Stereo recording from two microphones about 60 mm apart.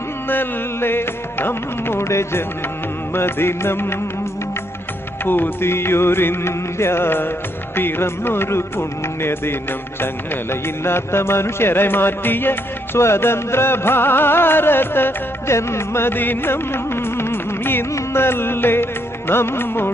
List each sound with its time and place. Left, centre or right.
0.3 s music: left
5.2 s music: left
15.5 s music: left